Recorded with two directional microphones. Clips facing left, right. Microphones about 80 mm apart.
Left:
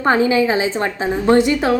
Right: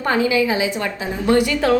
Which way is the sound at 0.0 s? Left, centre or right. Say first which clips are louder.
Left 3 dB; left.